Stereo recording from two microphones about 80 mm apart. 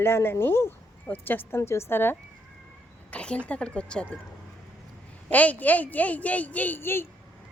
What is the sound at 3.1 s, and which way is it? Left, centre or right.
A woman's voice, centre.